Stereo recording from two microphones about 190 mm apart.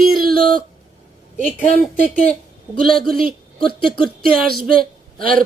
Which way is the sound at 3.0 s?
50° right (ahead or behind).